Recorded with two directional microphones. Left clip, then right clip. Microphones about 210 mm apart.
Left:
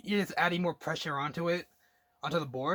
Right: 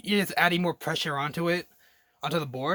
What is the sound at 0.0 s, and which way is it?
Speech, 40° right (ahead or behind).